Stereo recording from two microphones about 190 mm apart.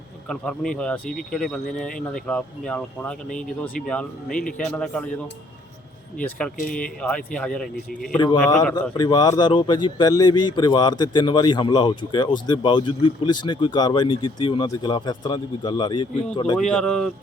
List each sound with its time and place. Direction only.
0.3 s speech: 5° left (ahead or behind)
6.1 s speech: 5° left (ahead or behind)
8.7 s speech: 20° left (ahead or behind)
16.6 s speech: 5° left (ahead or behind)